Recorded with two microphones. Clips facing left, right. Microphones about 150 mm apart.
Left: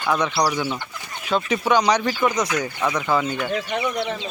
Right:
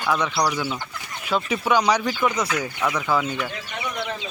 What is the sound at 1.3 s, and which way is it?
Speech, 5° right (ahead or behind).